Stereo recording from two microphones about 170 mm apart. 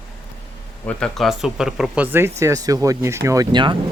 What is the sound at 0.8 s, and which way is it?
Speech, 5° left (ahead or behind).